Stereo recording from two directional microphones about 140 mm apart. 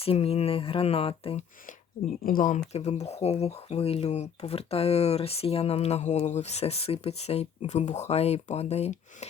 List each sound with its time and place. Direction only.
0.0 s speech: 45° left (ahead or behind)
2.2 s speech: 80° left
2.7 s speech: 50° left (ahead or behind)